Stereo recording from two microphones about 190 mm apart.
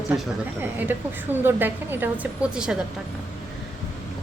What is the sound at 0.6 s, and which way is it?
A woman's voice, 10° right (ahead or behind).